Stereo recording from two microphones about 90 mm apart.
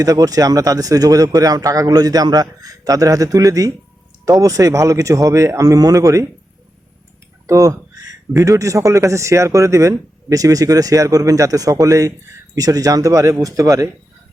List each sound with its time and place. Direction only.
0.0 s speech: 40° right (ahead or behind)
7.4 s speech: 40° right (ahead or behind)